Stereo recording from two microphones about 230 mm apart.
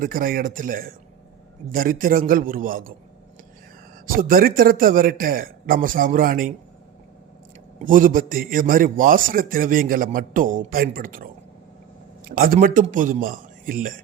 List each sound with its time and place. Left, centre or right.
0.0 s a man's voice: right
4.0 s a man's voice: right
7.8 s a man's voice: right
12.3 s a man's voice: right